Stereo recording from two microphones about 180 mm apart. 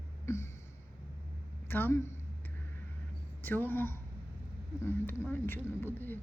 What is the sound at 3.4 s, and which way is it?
Speech, 10° left (ahead or behind).